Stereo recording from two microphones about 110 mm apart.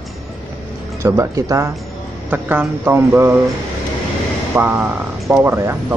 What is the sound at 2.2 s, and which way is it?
Speech, 15° right (ahead or behind).